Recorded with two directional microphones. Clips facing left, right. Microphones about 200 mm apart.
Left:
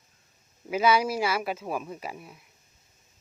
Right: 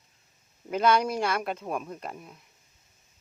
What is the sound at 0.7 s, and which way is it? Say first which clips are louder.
Speech: even; 5° left (ahead or behind).